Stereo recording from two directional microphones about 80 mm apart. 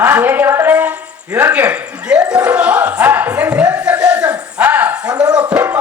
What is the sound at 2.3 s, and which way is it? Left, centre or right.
Music, centre.